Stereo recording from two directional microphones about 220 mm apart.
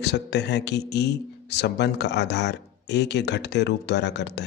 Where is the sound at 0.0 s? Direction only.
50° left (ahead or behind).